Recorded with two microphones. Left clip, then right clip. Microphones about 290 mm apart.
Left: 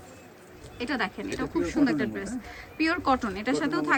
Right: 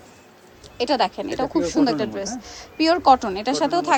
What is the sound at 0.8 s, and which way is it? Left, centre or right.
A woman's voice, centre.